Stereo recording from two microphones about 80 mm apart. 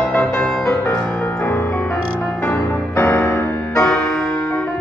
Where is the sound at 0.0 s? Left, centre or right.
Centre.